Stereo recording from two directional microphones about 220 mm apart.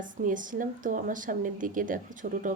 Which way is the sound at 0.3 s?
35° right (ahead or behind).